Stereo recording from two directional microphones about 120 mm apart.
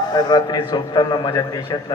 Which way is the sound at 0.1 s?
35° left (ahead or behind).